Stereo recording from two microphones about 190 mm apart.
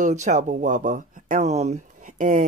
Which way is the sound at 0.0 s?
40° right (ahead or behind).